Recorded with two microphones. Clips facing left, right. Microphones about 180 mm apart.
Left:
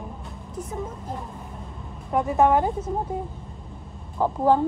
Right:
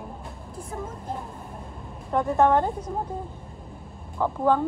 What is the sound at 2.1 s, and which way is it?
Speech, centre (ahead or behind).